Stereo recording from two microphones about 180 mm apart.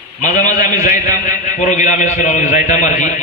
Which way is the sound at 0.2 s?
40° left (ahead or behind).